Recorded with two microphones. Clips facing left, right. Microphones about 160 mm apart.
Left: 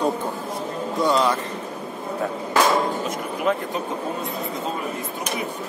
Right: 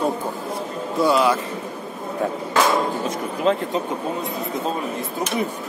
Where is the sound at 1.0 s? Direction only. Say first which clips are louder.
Right 2 dB; 10° right (ahead or behind).